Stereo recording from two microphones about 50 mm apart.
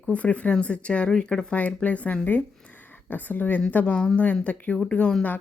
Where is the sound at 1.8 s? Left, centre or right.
Left.